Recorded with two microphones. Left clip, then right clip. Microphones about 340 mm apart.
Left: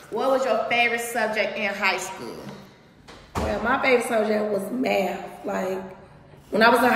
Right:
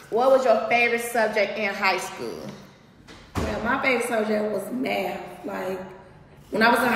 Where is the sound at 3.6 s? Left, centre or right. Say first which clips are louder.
Left 2 dB; centre.